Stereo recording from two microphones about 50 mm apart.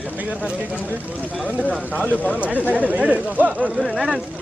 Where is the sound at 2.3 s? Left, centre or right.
Right.